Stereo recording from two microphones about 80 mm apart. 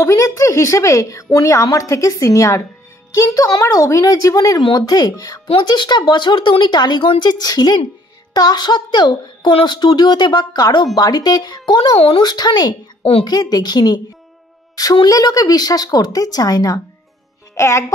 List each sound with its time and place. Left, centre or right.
0.0 s a woman's voice: left
5.6 s speech: left
15.0 s speech: left
17.6 s a woman's voice: left